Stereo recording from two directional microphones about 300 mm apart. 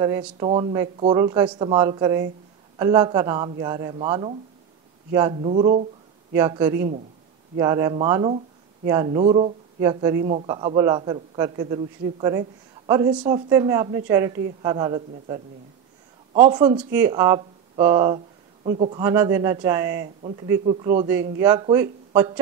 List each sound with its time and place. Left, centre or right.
0.0 s a man's voice: centre
16.4 s a man's voice: centre
20.2 s speech: centre
20.4 s a man's voice: centre